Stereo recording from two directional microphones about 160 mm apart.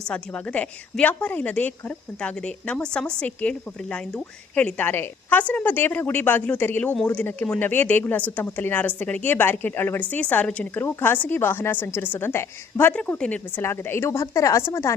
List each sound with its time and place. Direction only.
0.1 s speech: 5° left (ahead or behind)